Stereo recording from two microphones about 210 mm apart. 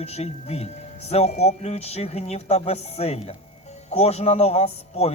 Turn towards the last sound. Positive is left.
turn(degrees=30)  # may be behind; listen again after turning